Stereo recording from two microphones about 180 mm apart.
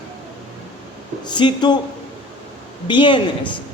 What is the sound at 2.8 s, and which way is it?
Speech, 25° left (ahead or behind).